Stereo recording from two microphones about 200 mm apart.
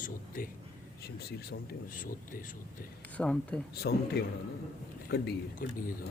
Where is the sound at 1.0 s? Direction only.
50° left (ahead or behind).